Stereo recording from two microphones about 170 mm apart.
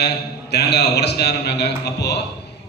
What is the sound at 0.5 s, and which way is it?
A man's voice, 75° left (ahead or behind).